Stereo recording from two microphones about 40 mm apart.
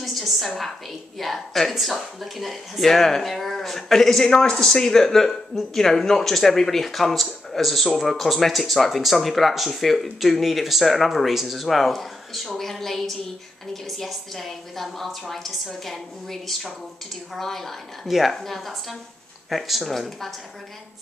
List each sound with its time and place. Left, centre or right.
0.0 s a sound: centre
1.1 s speech: centre
4.3 s a woman's voice: centre
18.0 s speech: centre
18.3 s a woman's voice: centre